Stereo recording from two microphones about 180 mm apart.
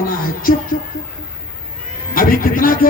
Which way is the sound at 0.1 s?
50° left (ahead or behind).